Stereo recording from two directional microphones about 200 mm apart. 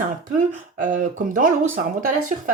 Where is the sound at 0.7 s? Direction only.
40° right (ahead or behind).